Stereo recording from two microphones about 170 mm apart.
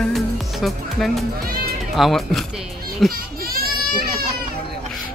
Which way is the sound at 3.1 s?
60° right (ahead or behind).